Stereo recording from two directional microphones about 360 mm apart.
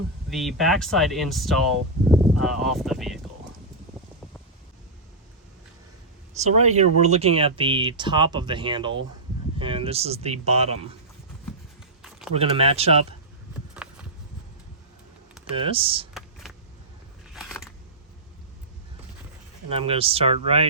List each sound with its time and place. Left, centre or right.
0.3 s speech: centre
6.3 s speech: centre
12.3 s speech: centre
13.8 s a sound: centre
15.5 s speech: centre
17.3 s scissors: centre
19.7 s speech: centre